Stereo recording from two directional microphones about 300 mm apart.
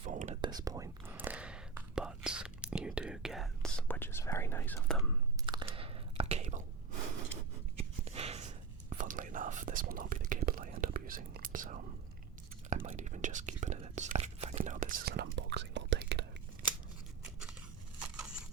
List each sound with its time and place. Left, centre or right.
0.0 s whispering: right; by 5.1 s centre
5.5 s biting: centre
7.8 s whispering: centre